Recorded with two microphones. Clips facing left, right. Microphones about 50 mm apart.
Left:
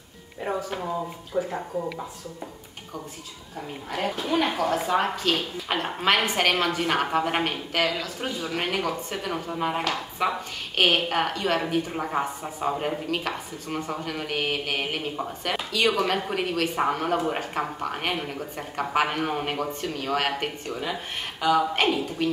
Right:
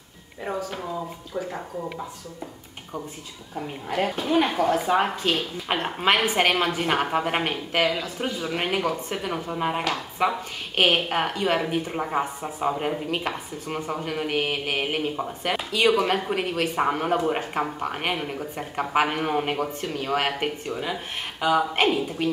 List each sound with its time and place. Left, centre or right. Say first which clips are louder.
0.4 s speech: left 1 dB; centre
3.9 s speech: right 3 dB; centre